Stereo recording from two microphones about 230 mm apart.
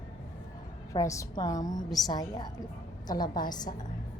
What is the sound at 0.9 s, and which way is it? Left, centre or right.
A woman's voice, centre.